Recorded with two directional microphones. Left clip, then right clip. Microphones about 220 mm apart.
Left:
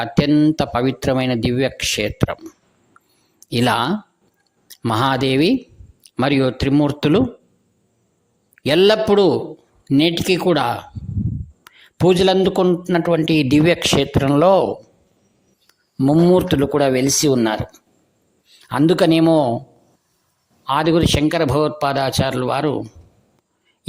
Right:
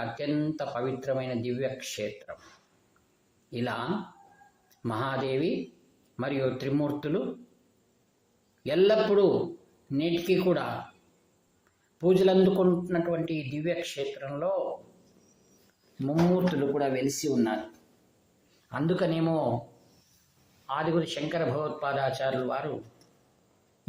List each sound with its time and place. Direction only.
0.1 s speech: 45° left (ahead or behind)
3.5 s speech: 55° left (ahead or behind)
8.6 s speech: 50° left (ahead or behind)
16.0 s speech: 50° left (ahead or behind)
18.7 s speech: 50° left (ahead or behind)
20.7 s speech: 50° left (ahead or behind)